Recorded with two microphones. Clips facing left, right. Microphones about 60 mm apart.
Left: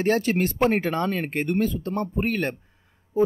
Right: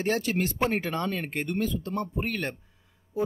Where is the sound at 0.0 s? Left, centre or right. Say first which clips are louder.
Left 5 dB; left.